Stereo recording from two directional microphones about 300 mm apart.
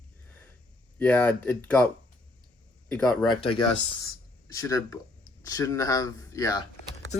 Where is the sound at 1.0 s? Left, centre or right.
Centre.